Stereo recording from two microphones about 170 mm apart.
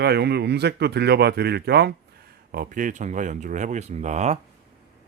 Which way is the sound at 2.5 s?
55° right (ahead or behind).